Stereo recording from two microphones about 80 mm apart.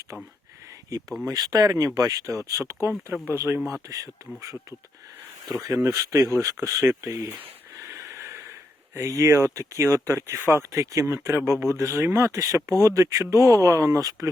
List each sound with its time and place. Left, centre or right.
1.3 s speech: right
3.7 s speech: right
7.9 s a sound: right
9.0 s speech: right